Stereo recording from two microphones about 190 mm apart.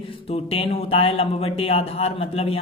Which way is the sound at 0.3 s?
30° left (ahead or behind).